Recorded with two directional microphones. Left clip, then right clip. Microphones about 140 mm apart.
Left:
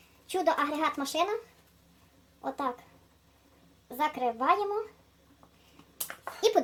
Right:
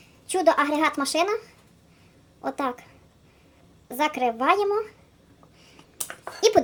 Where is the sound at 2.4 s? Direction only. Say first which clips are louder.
Right 5 dB; 20° right (ahead or behind).